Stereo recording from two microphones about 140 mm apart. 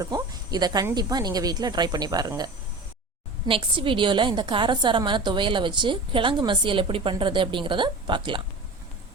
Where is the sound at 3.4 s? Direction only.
40° right (ahead or behind).